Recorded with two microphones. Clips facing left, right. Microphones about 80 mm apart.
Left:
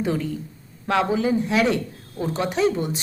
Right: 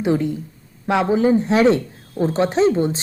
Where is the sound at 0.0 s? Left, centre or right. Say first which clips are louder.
Right 5 dB; right.